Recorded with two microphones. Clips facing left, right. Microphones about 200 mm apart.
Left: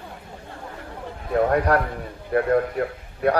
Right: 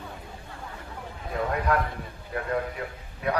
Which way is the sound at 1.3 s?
60° left (ahead or behind).